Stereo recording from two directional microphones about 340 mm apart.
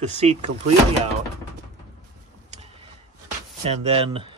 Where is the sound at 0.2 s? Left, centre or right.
Centre.